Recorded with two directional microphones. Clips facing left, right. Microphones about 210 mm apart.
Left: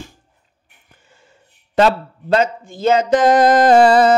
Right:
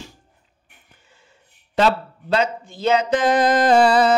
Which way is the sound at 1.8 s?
45° left (ahead or behind).